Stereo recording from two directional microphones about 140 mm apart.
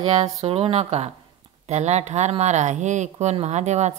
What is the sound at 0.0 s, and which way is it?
Speech, 45° right (ahead or behind).